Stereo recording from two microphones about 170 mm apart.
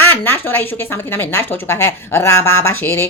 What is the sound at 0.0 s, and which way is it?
Speech, 15° left (ahead or behind).